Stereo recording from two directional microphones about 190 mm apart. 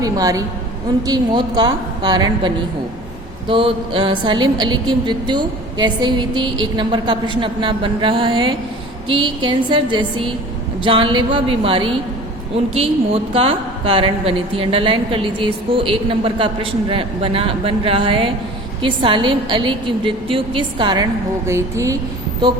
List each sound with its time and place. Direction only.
0.0 s a woman's voice: 20° right (ahead or behind)
3.5 s a woman's voice: 25° right (ahead or behind)